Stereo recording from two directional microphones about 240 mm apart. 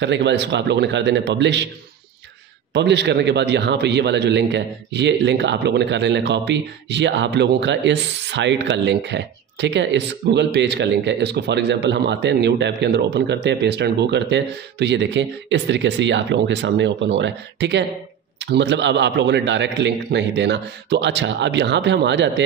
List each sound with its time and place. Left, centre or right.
0.0 s a man's voice: right
2.7 s a man's voice: right